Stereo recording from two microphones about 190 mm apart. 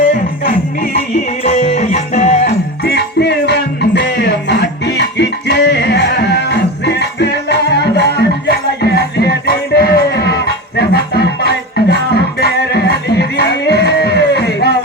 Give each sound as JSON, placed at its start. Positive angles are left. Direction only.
{"t": 0.4, "sound": "music", "side_deg": 50}
{"t": 1.5, "sound": "music", "side_deg": 40}